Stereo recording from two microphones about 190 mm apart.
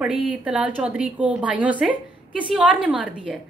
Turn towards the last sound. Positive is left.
turn(degrees=-5)  # may be behind; listen again after turning